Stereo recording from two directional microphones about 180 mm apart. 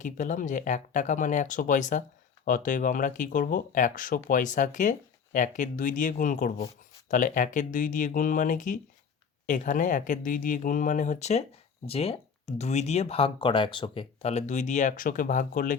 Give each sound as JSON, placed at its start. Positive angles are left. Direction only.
{"t": 0.0, "sound": "speech", "side_deg": 45}